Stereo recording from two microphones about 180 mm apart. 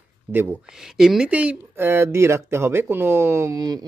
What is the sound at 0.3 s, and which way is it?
Speech, 10° right (ahead or behind).